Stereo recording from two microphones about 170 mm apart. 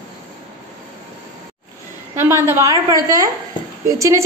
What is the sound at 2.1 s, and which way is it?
A woman's voice, 15° right (ahead or behind).